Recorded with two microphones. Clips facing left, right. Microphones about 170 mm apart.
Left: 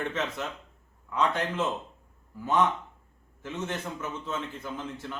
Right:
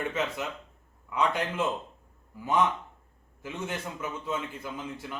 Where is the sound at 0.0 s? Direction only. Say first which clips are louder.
Right 1 dB; 10° right (ahead or behind).